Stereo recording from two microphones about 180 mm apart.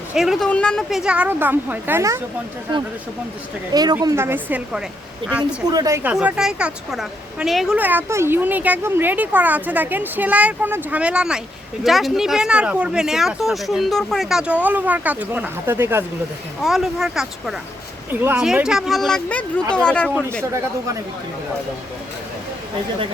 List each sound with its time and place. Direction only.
0.1 s speech: centre (ahead or behind)
3.7 s a woman's voice: 20° right (ahead or behind)
16.6 s speech: centre (ahead or behind)
20.5 s a woman's voice: 15° right (ahead or behind)